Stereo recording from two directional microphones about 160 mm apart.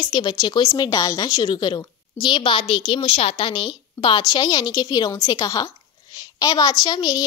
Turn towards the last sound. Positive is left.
turn(degrees=25)  # may be behind; listen again after turning